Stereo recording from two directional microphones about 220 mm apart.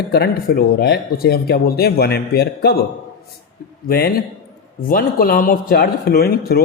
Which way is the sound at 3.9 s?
45° left (ahead or behind).